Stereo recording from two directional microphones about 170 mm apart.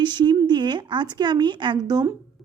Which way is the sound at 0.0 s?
25° right (ahead or behind).